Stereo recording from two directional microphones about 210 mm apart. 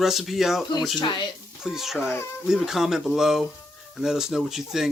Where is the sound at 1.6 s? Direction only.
Centre (ahead or behind).